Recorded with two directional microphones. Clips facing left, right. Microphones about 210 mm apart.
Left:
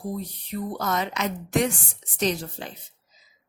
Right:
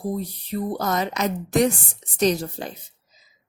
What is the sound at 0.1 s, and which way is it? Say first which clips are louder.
A woman's voice: right 4 dB; 35° right (ahead or behind).